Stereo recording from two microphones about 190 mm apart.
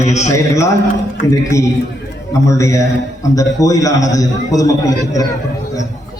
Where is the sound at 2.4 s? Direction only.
15° left (ahead or behind).